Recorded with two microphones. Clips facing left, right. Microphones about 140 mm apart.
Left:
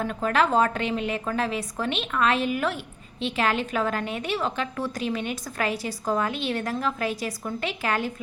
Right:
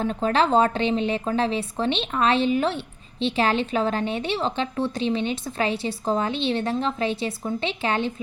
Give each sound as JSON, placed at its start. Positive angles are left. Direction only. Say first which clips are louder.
{"t": 0.0, "sound": "a woman's voice", "louder": "right 2 dB", "side_deg": -25}